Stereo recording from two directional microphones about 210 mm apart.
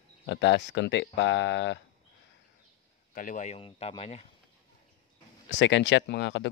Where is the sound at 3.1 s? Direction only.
40° left (ahead or behind).